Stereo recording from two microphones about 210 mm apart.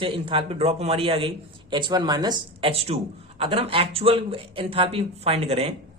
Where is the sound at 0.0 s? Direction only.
25° right (ahead or behind).